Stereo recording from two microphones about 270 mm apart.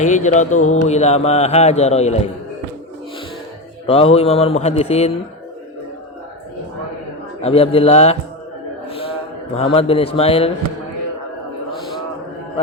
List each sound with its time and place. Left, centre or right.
0.0 s mantra: left
3.8 s mantra: left
7.4 s mantra: left
8.9 s a sound: left
9.6 s mantra: left